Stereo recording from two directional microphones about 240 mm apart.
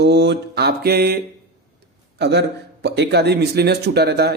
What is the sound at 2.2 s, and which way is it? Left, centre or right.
Speech, right.